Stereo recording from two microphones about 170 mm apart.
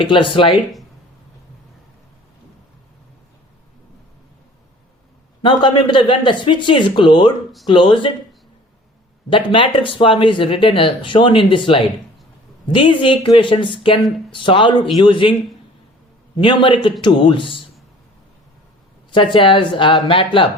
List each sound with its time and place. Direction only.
0.0 s speech: 30° left (ahead or behind)
0.5 s speech: centre (ahead or behind)
5.4 s speech: 30° left (ahead or behind)
9.3 s speech: 30° left (ahead or behind)
16.4 s speech: 30° left (ahead or behind)
19.1 s speech: 30° left (ahead or behind)